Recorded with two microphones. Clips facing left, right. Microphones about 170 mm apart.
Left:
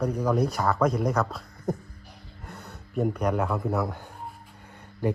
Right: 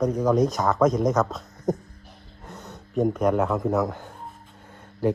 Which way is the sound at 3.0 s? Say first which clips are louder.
Right 4 dB; centre (ahead or behind).